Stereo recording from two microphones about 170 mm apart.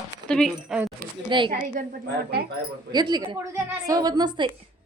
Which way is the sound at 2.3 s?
65° right (ahead or behind).